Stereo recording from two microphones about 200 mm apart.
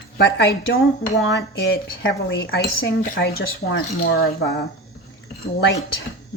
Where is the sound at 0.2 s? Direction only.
55° left (ahead or behind).